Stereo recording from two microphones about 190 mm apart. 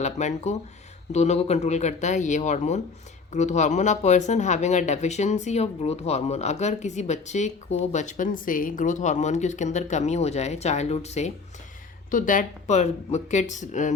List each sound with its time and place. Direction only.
0.0 s speech: 35° left (ahead or behind)